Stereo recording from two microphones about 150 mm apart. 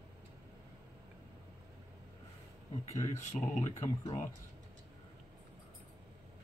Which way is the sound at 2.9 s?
50° left (ahead or behind).